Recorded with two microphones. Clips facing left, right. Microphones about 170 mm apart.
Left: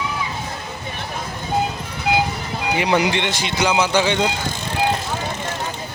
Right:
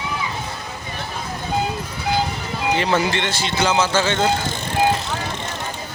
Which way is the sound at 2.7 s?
15° left (ahead or behind).